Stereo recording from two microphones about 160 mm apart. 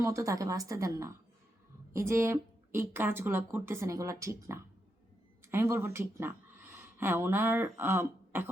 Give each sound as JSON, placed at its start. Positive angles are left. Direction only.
{"t": 0.0, "sound": "a woman's voice", "side_deg": -20}